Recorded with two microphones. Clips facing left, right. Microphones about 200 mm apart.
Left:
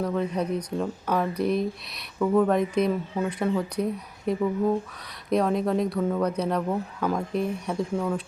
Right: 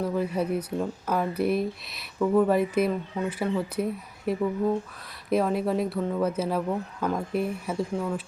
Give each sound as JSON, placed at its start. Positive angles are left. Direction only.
{"t": 0.0, "sound": "speech", "side_deg": -5}